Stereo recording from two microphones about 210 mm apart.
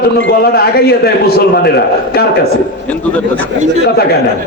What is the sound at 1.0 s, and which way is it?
Speech, 50° left (ahead or behind).